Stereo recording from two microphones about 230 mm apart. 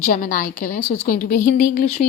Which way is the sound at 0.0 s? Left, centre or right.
Left.